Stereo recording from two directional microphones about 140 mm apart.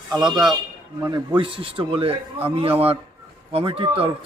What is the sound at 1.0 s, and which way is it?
A man's voice, 35° right (ahead or behind).